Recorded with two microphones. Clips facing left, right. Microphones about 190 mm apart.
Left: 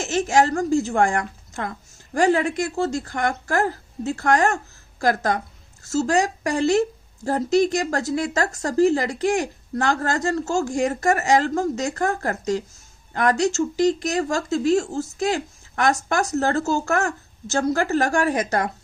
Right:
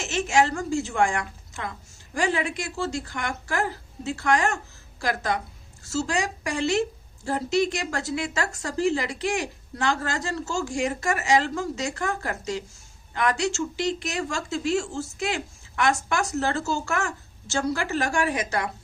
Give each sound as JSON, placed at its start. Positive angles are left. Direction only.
{"t": 0.0, "sound": "a woman's voice", "side_deg": 40}